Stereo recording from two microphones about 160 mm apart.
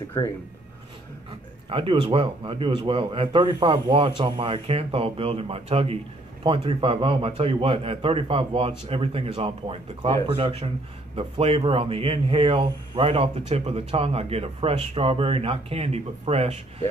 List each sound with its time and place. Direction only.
0.2 s speech: 25° left (ahead or behind)
1.7 s speech: 35° right (ahead or behind)